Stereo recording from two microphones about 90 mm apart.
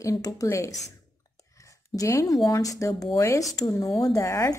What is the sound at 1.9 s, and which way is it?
Speech, 35° left (ahead or behind).